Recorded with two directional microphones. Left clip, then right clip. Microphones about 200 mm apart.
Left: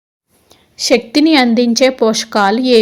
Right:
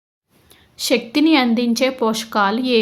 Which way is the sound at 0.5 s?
15° left (ahead or behind).